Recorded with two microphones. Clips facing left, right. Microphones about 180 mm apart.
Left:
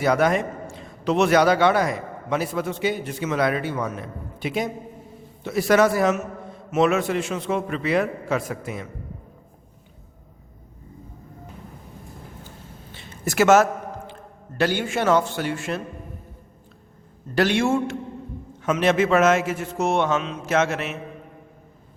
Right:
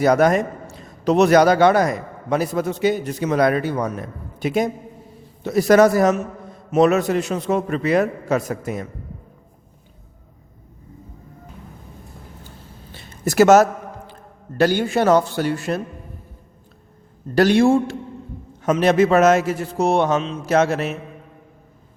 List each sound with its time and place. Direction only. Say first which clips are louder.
0.0 s a man's voice: right 4 dB; 40° right (ahead or behind)
12.9 s a sound: right 5 dB; 40° right (ahead or behind)
14.6 s a man's voice: right 5 dB; 40° right (ahead or behind)
17.3 s a man's voice: right 6 dB; 40° right (ahead or behind)